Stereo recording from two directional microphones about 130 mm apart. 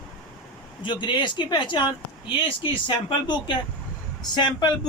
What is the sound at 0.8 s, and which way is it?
Speech, 35° left (ahead or behind).